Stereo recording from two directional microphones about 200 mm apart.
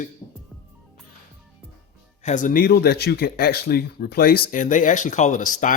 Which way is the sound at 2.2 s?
40° left (ahead or behind).